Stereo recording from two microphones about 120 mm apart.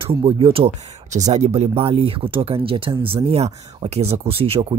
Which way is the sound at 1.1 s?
65° right (ahead or behind).